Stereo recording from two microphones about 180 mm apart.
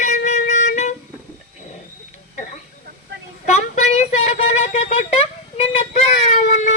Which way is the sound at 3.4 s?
40° left (ahead or behind).